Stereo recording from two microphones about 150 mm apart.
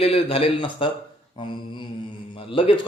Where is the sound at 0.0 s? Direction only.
40° left (ahead or behind).